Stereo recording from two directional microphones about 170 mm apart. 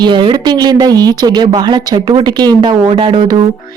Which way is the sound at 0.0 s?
30° right (ahead or behind).